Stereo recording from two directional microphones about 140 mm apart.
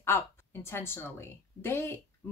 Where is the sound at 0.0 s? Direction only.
15° left (ahead or behind).